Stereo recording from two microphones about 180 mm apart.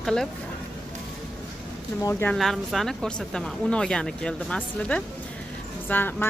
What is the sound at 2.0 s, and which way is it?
Speech, 15° left (ahead or behind).